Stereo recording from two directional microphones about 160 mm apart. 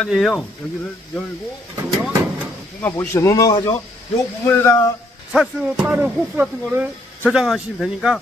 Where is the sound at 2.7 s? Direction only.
15° left (ahead or behind).